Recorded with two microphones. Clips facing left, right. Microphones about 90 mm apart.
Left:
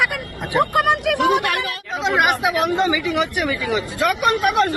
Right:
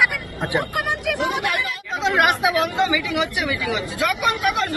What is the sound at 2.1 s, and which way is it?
Speech, 15° left (ahead or behind).